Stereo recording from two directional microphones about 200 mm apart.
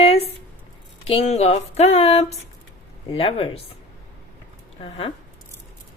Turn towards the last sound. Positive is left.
turn(degrees=30)  # may be behind; listen again after turning